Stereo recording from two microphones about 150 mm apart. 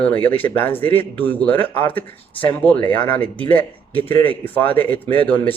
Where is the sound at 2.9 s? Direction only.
30° left (ahead or behind).